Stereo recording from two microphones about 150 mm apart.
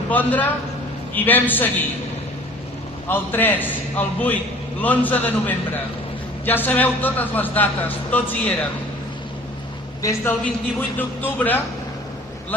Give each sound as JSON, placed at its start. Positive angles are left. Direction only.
{"t": 0.1, "sound": "speech", "side_deg": 10}
{"t": 3.1, "sound": "speech", "side_deg": 15}
{"t": 10.0, "sound": "a woman's voice", "side_deg": 20}